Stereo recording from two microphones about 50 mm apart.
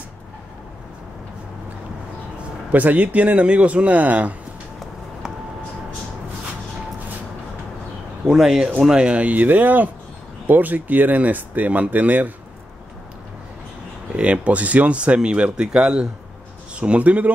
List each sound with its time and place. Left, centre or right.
2.7 s speech: right
8.3 s speech: centre
8.9 s speech: right
14.1 s speech: right